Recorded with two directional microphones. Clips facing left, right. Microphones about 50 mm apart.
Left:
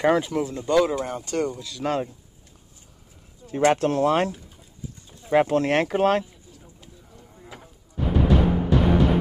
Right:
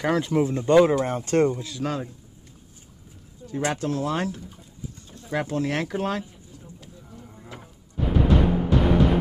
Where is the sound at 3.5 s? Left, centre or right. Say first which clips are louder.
Left 6 dB; left.